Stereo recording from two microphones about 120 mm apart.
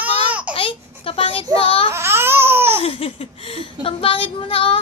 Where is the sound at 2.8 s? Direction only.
50° left (ahead or behind).